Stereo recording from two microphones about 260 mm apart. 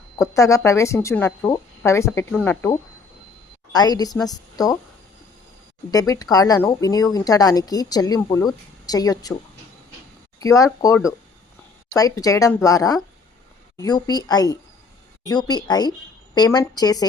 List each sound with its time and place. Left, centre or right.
0.2 s speech: centre
5.9 s speech: centre
10.4 s speech: centre